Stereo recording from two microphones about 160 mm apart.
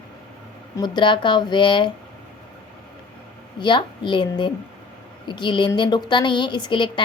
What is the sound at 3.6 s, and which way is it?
A woman's voice, 30° left (ahead or behind).